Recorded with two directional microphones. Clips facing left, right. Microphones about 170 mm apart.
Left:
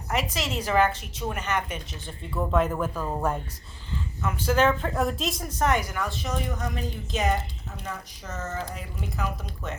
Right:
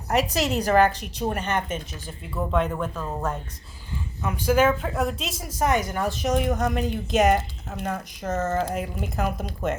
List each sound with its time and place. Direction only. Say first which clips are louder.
0.1 s speech: right 6 dB; 40° right (ahead or behind)
2.0 s speech: left 1 dB; centre (ahead or behind)
3.9 s speech: right 1 dB; 15° right (ahead or behind)
5.9 s speech: right 5 dB; 35° right (ahead or behind)
6.2 s a woman's voice: right 8 dB; 65° right (ahead or behind)